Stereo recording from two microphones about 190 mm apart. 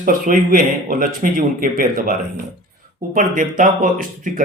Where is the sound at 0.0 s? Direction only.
45° right (ahead or behind).